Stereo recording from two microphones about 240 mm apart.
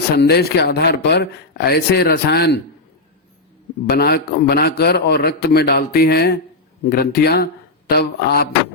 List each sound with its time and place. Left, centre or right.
0.2 s a man's voice: left
3.8 s a man's voice: left